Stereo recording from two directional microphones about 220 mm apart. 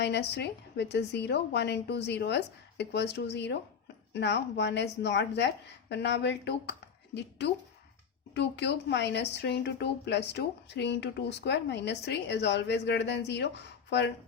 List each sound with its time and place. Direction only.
0.0 s speech: 50° left (ahead or behind)